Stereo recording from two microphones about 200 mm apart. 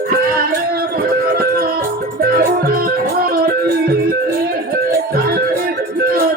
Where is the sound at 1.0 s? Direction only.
50° right (ahead or behind).